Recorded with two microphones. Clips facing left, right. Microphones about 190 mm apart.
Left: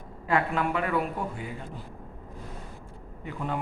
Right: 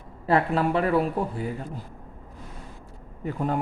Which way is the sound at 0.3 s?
35° right (ahead or behind).